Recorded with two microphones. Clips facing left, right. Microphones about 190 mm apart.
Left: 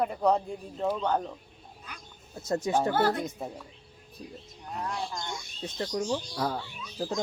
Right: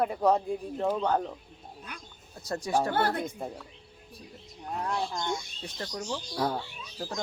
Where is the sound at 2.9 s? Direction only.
55° right (ahead or behind).